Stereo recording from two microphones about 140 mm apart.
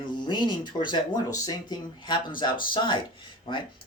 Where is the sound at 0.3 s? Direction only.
35° left (ahead or behind).